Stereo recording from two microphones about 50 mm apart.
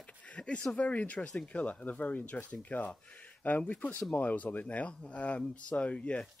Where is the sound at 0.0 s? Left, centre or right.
Left.